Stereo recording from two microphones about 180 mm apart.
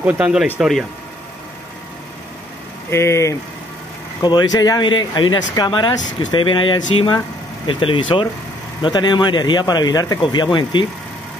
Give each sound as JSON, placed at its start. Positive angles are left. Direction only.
{"t": 0.0, "sound": "speech", "side_deg": -10}
{"t": 2.9, "sound": "speech", "side_deg": 15}